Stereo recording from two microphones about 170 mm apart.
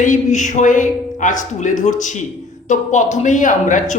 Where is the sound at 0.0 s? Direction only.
45° left (ahead or behind).